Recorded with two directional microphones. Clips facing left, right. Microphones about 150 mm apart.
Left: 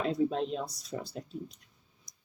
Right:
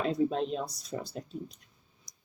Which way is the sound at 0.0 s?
40° right (ahead or behind).